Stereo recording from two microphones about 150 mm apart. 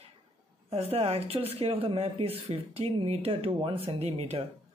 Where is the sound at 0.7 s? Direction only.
40° right (ahead or behind).